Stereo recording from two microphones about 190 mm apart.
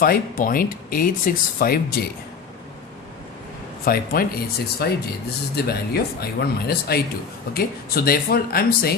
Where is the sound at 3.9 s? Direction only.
50° left (ahead or behind).